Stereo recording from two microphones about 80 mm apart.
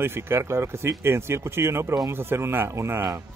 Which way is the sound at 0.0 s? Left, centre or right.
Right.